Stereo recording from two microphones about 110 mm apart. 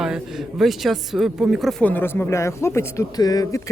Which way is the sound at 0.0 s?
5° right (ahead or behind).